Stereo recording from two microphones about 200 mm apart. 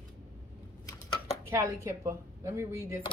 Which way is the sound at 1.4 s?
15° right (ahead or behind).